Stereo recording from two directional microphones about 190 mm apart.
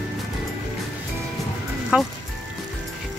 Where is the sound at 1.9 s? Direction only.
5° right (ahead or behind).